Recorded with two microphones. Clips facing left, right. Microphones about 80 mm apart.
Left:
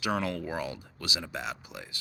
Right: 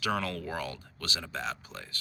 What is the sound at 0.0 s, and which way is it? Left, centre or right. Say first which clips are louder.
Speech: left 1 dB; left.